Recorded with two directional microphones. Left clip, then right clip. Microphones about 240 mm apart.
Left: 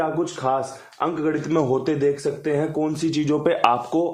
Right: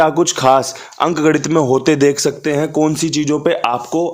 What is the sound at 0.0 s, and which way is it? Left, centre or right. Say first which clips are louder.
A man's voice: right 11 dB; right.